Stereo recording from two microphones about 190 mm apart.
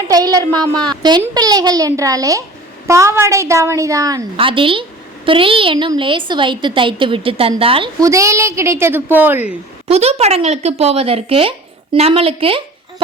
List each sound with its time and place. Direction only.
0.1 s a woman's voice: 20° right (ahead or behind)
8.0 s a woman's voice: 15° right (ahead or behind)
9.9 s a woman's voice: 35° right (ahead or behind)